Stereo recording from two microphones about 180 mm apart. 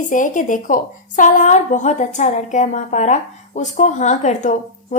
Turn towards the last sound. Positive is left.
turn(degrees=40)  # may be behind; listen again after turning